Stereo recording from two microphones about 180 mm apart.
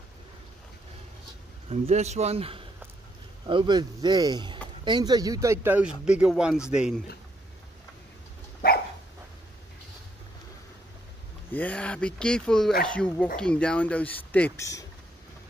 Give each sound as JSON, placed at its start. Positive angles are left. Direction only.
{"t": 1.7, "sound": "a man's voice", "side_deg": -35}
{"t": 8.6, "sound": "dog", "side_deg": 55}
{"t": 11.5, "sound": "speech", "side_deg": 10}